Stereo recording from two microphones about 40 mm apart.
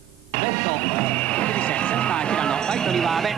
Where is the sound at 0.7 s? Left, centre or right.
Left; by 3.3 s centre.